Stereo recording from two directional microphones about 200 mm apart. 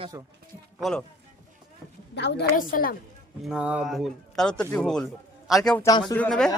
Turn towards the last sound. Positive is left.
turn(degrees=5)  # may be behind; listen again after turning